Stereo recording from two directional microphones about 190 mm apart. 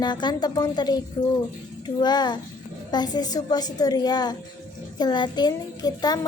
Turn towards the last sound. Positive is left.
turn(degrees=20)  # may be behind; listen again after turning